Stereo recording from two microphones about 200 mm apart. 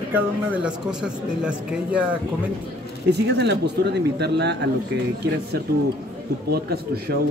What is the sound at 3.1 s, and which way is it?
Speech, 60° right (ahead or behind).